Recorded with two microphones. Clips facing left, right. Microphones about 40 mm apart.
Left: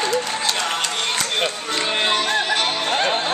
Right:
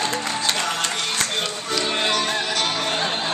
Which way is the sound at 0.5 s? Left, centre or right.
Left.